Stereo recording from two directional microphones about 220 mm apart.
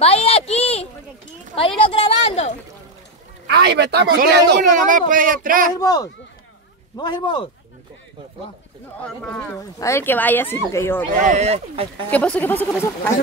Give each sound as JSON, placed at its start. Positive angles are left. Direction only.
{"t": 0.0, "sound": "a woman's voice", "side_deg": 25}
{"t": 3.4, "sound": "speech", "side_deg": -50}
{"t": 5.8, "sound": "a woman's voice", "side_deg": 15}
{"t": 9.0, "sound": "speech", "side_deg": 5}
{"t": 9.6, "sound": "speech", "side_deg": 15}
{"t": 11.1, "sound": "speech", "side_deg": -35}
{"t": 12.1, "sound": "speech", "side_deg": 5}